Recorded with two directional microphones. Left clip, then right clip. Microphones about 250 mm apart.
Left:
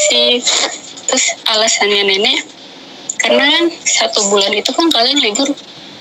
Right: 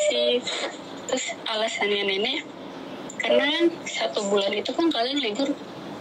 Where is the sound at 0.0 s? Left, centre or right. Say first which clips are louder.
Left 11 dB; left.